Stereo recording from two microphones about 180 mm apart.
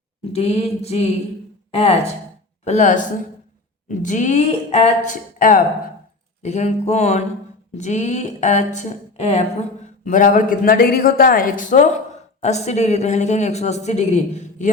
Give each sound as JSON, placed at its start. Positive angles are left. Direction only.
{"t": 0.3, "sound": "a woman's voice", "side_deg": 35}